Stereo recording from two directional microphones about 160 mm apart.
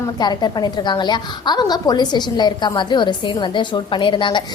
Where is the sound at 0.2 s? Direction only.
25° left (ahead or behind).